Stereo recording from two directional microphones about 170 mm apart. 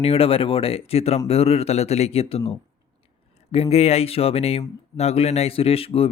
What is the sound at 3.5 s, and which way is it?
A man's voice, 35° left (ahead or behind).